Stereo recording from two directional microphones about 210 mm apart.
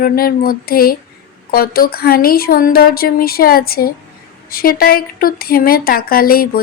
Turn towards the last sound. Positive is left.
turn(degrees=45)  # may be behind; listen again after turning